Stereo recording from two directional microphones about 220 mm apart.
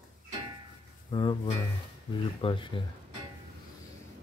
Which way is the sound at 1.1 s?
20° left (ahead or behind).